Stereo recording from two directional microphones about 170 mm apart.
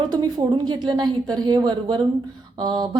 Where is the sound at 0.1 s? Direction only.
25° right (ahead or behind).